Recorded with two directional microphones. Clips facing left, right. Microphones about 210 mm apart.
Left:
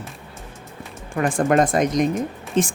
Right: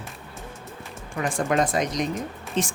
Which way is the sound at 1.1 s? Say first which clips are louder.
Left 6 dB; 50° left (ahead or behind).